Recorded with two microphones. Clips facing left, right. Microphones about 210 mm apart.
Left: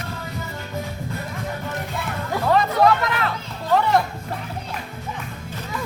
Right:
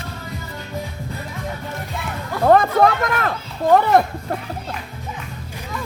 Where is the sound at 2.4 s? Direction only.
50° right (ahead or behind).